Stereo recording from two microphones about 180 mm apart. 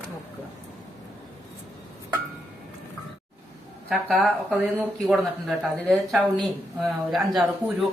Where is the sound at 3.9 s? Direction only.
Centre (ahead or behind).